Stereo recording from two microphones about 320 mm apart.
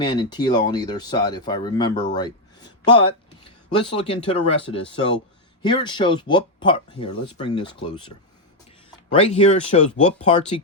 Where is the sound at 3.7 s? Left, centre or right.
Centre.